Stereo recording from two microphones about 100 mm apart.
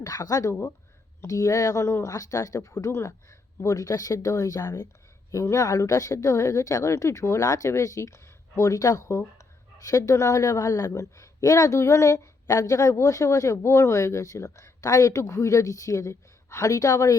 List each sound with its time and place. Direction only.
0.0 s a woman's voice: 35° left (ahead or behind)